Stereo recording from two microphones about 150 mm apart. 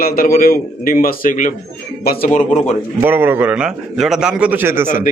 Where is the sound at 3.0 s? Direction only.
15° right (ahead or behind).